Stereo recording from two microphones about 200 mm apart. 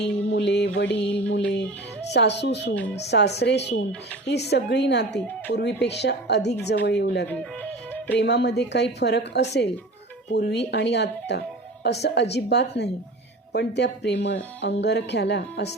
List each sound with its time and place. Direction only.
0.3 s music: 60° left (ahead or behind)
2.1 s speech: 60° left (ahead or behind)
7.3 s music: 10° left (ahead or behind)
8.2 s speech: 55° left (ahead or behind)